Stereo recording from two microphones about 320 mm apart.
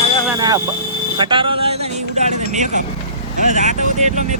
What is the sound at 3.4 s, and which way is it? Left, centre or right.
Speech, right.